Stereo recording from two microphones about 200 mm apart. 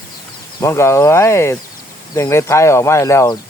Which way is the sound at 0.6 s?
15° left (ahead or behind).